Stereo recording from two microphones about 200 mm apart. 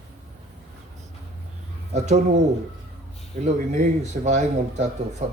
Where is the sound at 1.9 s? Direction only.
35° right (ahead or behind).